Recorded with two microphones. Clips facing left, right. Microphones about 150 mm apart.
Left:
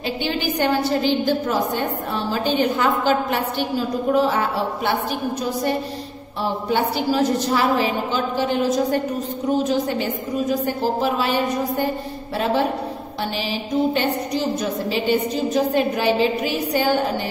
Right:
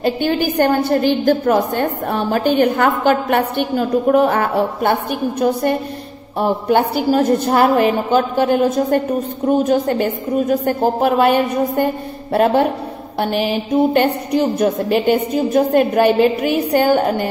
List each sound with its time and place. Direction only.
0.0 s a woman's voice: 50° right (ahead or behind)
7.1 s a woman's voice: 55° right (ahead or behind)
13.2 s a woman's voice: 55° right (ahead or behind)